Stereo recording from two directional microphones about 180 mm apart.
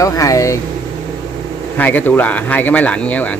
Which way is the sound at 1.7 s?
10° left (ahead or behind).